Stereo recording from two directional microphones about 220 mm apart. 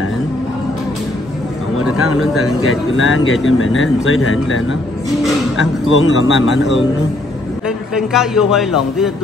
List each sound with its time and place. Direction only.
1.8 s speech: 75° left (ahead or behind); by 6.7 s 55° left (ahead or behind)
7.6 s a man's voice: centre (ahead or behind)